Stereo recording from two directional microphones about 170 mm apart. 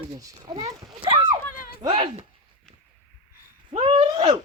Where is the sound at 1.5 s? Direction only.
55° left (ahead or behind).